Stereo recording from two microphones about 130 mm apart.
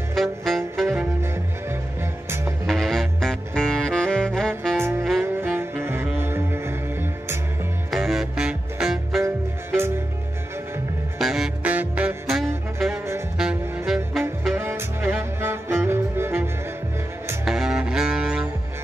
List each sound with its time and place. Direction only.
0.1 s music: centre (ahead or behind)
1.2 s music: 20° right (ahead or behind)
2.6 s saxophone: centre (ahead or behind)
4.7 s music: 20° right (ahead or behind)
5.2 s saxophone: 15° right (ahead or behind)
6.1 s music: 20° right (ahead or behind)
7.9 s music: centre (ahead or behind)
11.1 s music: centre (ahead or behind)
12.4 s saxophone: centre (ahead or behind)
12.9 s saxophone: 20° right (ahead or behind)
13.4 s saxophone: 5° right (ahead or behind)
14.5 s music: 20° right (ahead or behind)
17.5 s music: 5° right (ahead or behind)